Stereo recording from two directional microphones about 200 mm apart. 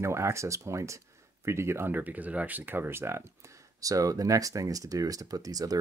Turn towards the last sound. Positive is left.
turn(degrees=-20)  # may be behind; listen again after turning